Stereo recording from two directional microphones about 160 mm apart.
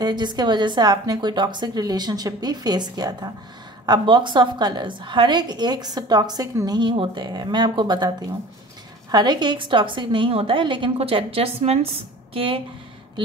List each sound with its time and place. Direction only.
0.0 s a woman's voice: 25° right (ahead or behind)
9.1 s a woman's voice: 25° right (ahead or behind)